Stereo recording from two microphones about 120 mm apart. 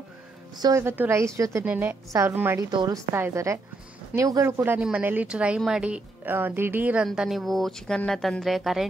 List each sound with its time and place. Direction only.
0.6 s a woman's voice: 30° right (ahead or behind)
0.8 s a woman's voice: 20° right (ahead or behind)
2.7 s a woman's voice: 40° right (ahead or behind)
3.2 s a woman's voice: 20° right (ahead or behind)
7.1 s speech: centre (ahead or behind)